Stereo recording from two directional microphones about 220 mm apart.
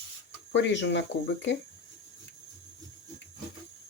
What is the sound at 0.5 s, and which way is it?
Speech, 55° left (ahead or behind).